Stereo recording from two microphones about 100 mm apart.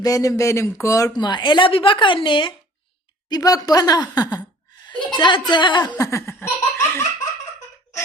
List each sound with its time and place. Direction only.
0.0 s speech: 35° left (ahead or behind)
1.2 s a woman's voice: 50° left (ahead or behind)
3.2 s a woman's voice: 40° left (ahead or behind)
6.0 s laughter: 30° left (ahead or behind)